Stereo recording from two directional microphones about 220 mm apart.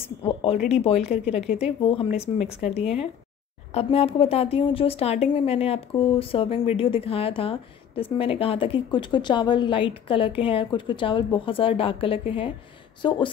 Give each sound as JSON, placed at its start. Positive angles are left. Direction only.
{"t": 0.2, "sound": "a woman's voice", "side_deg": 25}
{"t": 3.7, "sound": "a woman's voice", "side_deg": 25}